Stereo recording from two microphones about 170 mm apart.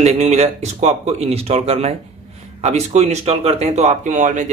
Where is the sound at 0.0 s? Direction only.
40° right (ahead or behind).